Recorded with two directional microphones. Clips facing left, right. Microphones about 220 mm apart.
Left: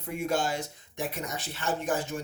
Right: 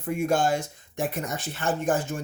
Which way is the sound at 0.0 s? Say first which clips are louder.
Right 5 dB; 50° right (ahead or behind).